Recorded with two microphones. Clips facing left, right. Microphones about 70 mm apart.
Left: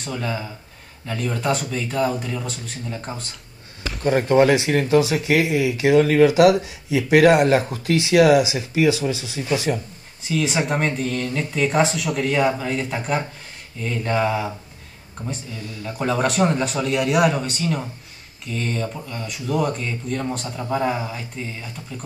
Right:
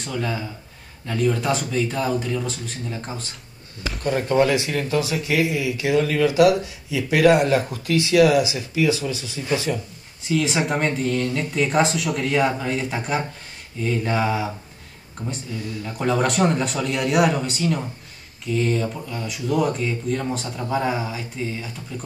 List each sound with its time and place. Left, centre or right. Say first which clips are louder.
0.1 s speech: even; centre
4.0 s speech: left 3 dB; left
10.2 s speech: even; centre